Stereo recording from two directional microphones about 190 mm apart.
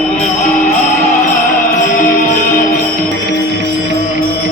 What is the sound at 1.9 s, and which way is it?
Music, 45° left (ahead or behind).